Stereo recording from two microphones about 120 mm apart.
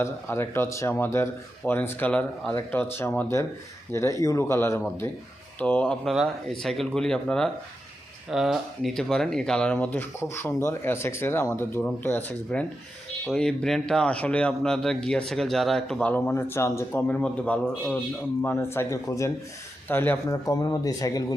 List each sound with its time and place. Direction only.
0.0 s speech: 20° left (ahead or behind); by 16.1 s 5° left (ahead or behind)
16.1 s speech: 20° left (ahead or behind)
20.2 s speech: 30° left (ahead or behind)